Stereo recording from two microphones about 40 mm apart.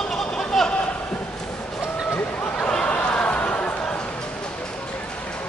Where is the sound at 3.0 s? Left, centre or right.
Left.